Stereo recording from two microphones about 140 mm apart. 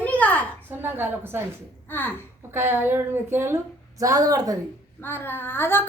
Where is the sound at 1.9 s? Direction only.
15° left (ahead or behind).